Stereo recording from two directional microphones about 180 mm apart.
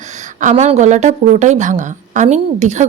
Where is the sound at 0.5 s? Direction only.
35° right (ahead or behind).